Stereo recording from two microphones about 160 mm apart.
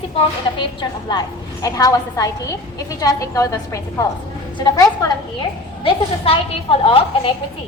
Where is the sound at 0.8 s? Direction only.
30° left (ahead or behind).